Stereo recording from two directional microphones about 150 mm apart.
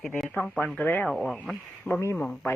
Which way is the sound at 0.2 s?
5° left (ahead or behind).